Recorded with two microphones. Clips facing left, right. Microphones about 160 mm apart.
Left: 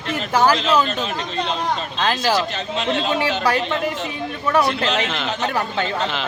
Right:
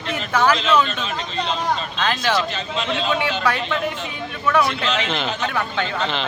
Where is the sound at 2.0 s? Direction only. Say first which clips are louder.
Left 3 dB; 35° left (ahead or behind).